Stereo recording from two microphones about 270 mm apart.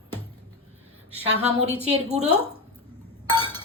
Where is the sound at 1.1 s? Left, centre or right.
Centre.